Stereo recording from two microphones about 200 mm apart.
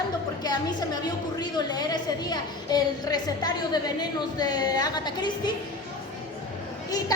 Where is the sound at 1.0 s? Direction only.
20° left (ahead or behind).